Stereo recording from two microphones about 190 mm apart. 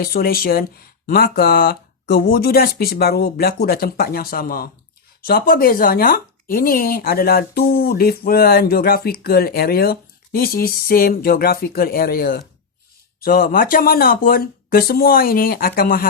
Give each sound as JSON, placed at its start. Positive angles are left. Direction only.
{"t": 0.0, "sound": "speech", "side_deg": 55}